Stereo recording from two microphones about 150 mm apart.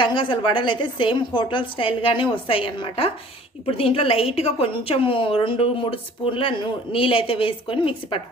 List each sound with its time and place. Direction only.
0.0 s a woman's voice: 35° left (ahead or behind)